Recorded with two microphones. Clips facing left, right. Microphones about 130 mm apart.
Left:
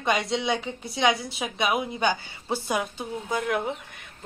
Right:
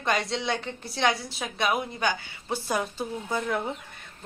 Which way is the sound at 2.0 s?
25° left (ahead or behind).